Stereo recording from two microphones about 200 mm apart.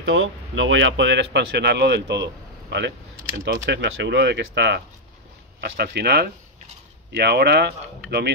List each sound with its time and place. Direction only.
0.0 s speech: 75° right (ahead or behind); by 8.3 s 55° right (ahead or behind)